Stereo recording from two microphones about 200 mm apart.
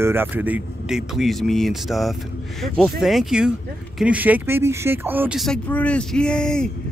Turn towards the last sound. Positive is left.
turn(degrees=5)  # may be behind; listen again after turning